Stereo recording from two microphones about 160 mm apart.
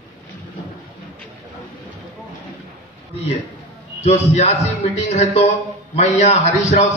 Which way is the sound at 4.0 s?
40° left (ahead or behind).